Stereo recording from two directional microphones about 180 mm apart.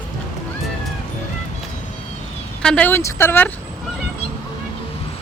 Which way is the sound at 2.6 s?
5° left (ahead or behind).